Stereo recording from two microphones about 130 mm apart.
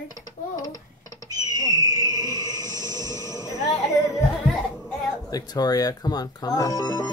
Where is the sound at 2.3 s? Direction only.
30° right (ahead or behind).